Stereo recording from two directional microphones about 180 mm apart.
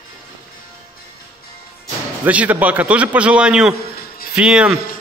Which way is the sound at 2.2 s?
10° right (ahead or behind).